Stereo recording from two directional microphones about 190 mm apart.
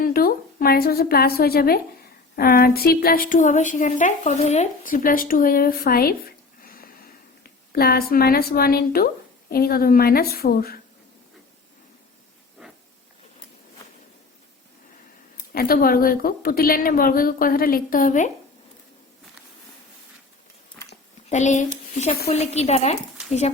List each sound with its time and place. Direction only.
0.0 s a woman's voice: 50° left (ahead or behind)
12.6 s hiss: 5° right (ahead or behind)
15.5 s a woman's voice: 50° left (ahead or behind)
21.2 s a woman's voice: 40° left (ahead or behind)